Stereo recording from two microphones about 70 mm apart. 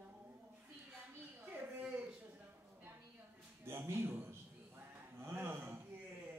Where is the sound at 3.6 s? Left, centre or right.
Right.